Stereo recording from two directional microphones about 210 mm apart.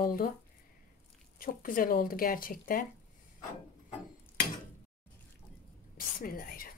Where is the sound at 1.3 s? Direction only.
40° left (ahead or behind).